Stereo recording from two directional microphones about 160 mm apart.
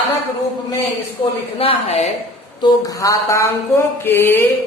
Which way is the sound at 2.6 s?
20° left (ahead or behind).